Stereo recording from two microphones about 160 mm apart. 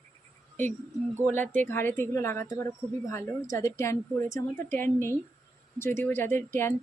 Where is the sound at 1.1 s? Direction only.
10° left (ahead or behind).